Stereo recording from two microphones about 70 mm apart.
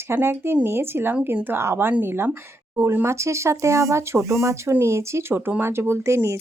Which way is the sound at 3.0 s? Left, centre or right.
Right.